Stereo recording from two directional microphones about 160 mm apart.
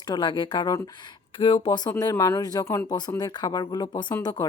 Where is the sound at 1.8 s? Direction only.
20° left (ahead or behind).